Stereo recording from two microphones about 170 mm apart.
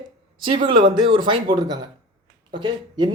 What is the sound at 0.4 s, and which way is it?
Speech, 30° right (ahead or behind).